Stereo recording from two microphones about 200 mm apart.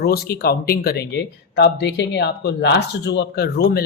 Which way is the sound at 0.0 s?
50° left (ahead or behind).